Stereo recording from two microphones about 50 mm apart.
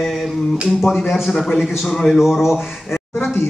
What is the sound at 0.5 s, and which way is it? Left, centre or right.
Speech, centre.